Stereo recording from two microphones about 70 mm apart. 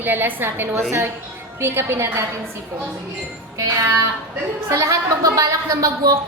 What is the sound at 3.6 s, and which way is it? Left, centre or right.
A woman's voice, right.